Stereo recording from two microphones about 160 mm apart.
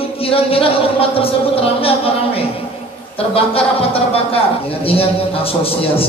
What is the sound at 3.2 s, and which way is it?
A man's voice, 35° left (ahead or behind).